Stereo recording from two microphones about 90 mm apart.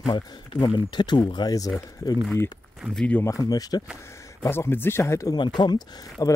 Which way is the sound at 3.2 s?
40° left (ahead or behind).